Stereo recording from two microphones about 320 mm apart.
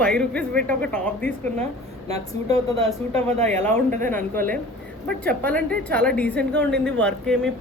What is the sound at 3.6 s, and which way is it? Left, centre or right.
A woman's voice, centre.